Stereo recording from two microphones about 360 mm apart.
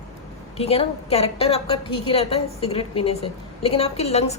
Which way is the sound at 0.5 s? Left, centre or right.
Centre.